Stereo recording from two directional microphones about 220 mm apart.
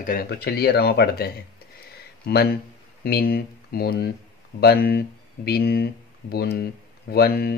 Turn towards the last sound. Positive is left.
turn(degrees=45)  # may be behind; listen again after turning